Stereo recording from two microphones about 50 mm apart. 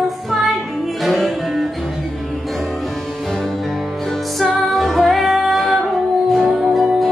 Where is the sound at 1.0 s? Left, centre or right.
Centre.